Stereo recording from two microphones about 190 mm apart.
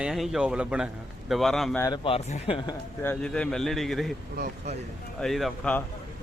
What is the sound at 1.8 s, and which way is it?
Speech, 25° left (ahead or behind).